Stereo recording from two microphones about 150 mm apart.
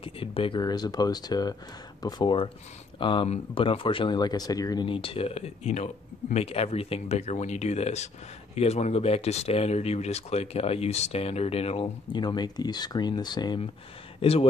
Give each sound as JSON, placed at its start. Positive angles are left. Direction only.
{"t": 0.0, "sound": "speech", "side_deg": 40}
{"t": 14.2, "sound": "speech", "side_deg": 40}